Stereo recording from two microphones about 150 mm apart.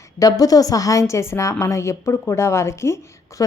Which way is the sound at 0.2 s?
25° left (ahead or behind).